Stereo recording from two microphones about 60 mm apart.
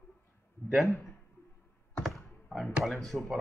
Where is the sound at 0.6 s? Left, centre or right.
Left.